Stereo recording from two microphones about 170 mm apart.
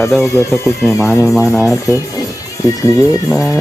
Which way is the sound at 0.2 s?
15° left (ahead or behind).